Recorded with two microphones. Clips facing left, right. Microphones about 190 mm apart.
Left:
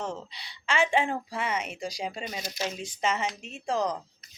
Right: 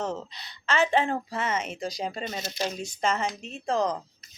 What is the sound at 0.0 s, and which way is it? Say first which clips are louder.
Speech: right 3 dB; 40° right (ahead or behind).